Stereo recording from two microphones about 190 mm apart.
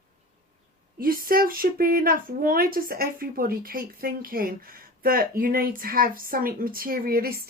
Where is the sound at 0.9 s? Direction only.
50° right (ahead or behind).